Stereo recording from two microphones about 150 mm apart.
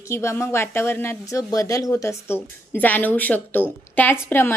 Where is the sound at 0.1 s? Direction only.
20° left (ahead or behind).